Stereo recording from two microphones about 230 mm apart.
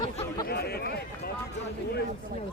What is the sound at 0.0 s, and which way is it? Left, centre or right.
Chatter, left.